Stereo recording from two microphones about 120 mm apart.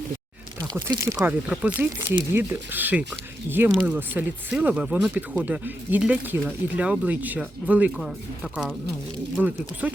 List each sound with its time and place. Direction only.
0.6 s speech: 35° right (ahead or behind)
1.2 s speech: 10° right (ahead or behind)
9.4 s speech: 15° right (ahead or behind)